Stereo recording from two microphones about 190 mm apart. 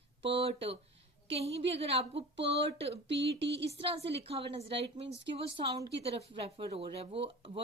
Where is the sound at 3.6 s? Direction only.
30° right (ahead or behind).